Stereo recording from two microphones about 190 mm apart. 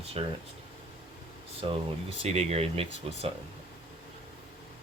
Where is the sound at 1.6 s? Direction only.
30° right (ahead or behind).